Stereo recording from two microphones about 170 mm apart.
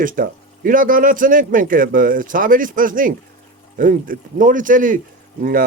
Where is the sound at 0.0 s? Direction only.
55° right (ahead or behind).